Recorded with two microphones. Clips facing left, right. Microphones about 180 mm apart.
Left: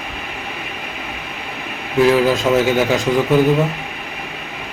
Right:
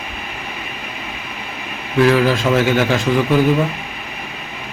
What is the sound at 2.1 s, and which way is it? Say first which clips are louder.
Speech: left 1 dB; 15° left (ahead or behind).